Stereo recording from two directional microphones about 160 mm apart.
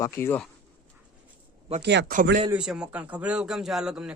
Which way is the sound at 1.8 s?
90° right.